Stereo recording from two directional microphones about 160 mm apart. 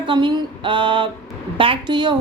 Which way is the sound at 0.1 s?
30° right (ahead or behind).